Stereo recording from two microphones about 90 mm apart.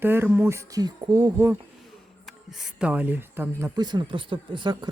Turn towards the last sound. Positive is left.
turn(degrees=-60)  # may be behind; listen again after turning